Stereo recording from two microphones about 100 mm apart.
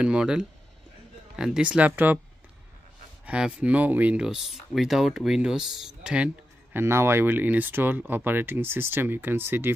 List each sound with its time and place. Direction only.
0.0 s speech: 10° right (ahead or behind)
3.3 s speech: 10° right (ahead or behind)
6.8 s speech: 25° right (ahead or behind)